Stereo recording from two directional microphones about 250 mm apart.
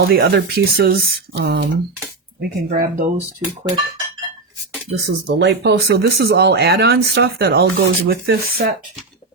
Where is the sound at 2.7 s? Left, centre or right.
Right.